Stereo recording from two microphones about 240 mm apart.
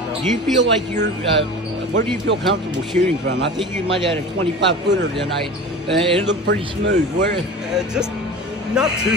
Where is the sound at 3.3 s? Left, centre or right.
Right.